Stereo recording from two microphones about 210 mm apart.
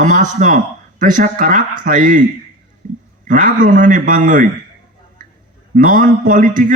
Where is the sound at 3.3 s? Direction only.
40° right (ahead or behind).